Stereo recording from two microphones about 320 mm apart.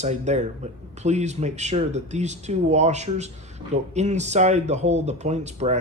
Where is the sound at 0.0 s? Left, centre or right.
Right.